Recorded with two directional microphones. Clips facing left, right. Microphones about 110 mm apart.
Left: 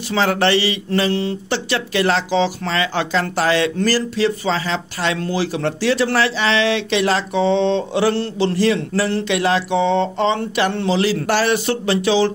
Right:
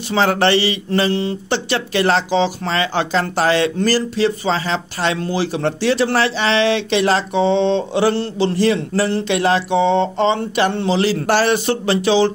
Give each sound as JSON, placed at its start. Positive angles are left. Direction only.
{"t": 0.1, "sound": "speech", "side_deg": -30}